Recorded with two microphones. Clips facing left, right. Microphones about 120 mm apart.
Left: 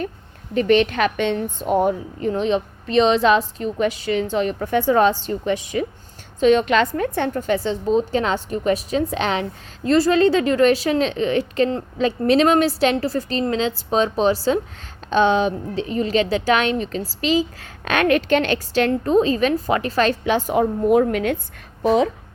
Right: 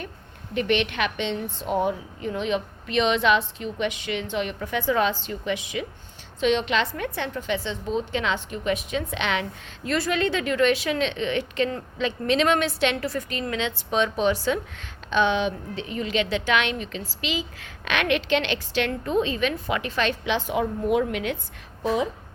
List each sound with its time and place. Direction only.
0.5 s a woman's voice: 40° left (ahead or behind)
21.8 s speech: 70° left (ahead or behind)